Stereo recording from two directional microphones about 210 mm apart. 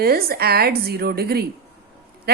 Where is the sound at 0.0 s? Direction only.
45° right (ahead or behind).